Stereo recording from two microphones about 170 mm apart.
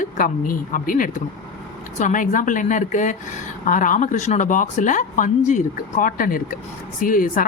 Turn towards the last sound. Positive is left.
turn(degrees=55)  # may be behind; listen again after turning